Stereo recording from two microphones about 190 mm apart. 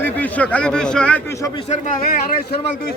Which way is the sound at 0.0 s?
10° left (ahead or behind).